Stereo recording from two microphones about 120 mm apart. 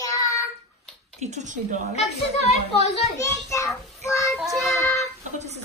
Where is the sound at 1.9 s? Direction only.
65° left (ahead or behind).